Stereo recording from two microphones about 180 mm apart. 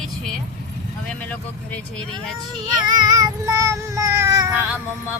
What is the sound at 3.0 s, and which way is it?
Child singing, 15° right (ahead or behind).